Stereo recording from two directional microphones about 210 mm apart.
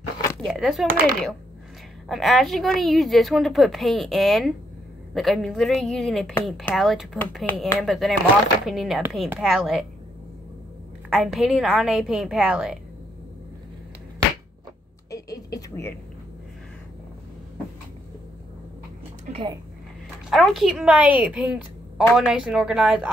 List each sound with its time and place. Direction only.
0.4 s a woman's voice: centre (ahead or behind)
0.8 s speech: 40° right (ahead or behind)
2.0 s a woman's voice: centre (ahead or behind)
11.1 s a woman's voice: centre (ahead or behind)
15.0 s a sound: 15° left (ahead or behind)
19.3 s speech: 20° right (ahead or behind)
20.2 s a woman's voice: centre (ahead or behind)